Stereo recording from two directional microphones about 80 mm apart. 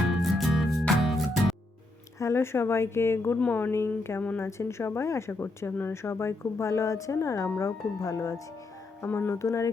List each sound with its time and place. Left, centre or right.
0.1 s music: centre
2.1 s speech: left
9.0 s speech: left